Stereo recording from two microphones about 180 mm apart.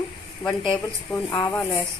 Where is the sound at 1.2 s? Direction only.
15° left (ahead or behind).